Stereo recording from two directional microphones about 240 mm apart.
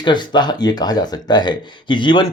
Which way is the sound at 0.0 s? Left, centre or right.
Centre.